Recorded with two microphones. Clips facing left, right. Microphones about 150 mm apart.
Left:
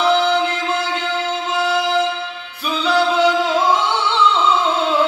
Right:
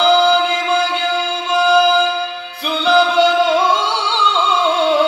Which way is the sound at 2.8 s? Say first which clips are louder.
Right 3 dB; 80° right.